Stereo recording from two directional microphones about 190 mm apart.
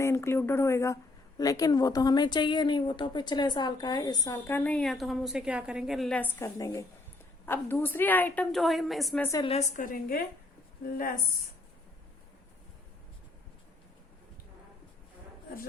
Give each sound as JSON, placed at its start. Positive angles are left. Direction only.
{"t": 0.0, "sound": "a woman's voice", "side_deg": 15}
{"t": 9.2, "sound": "a woman's voice", "side_deg": 20}
{"t": 9.5, "sound": "a woman's voice", "side_deg": 40}